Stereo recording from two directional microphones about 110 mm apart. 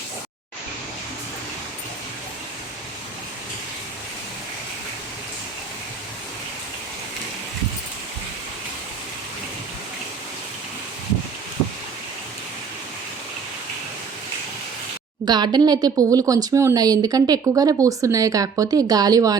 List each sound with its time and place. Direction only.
15.2 s speech: 40° right (ahead or behind)